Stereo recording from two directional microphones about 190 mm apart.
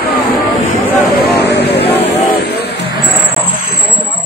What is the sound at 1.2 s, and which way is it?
Vehicle, 60° left (ahead or behind).